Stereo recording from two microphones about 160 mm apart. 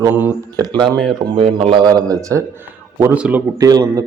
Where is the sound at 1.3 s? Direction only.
35° right (ahead or behind); by 3.4 s 10° right (ahead or behind).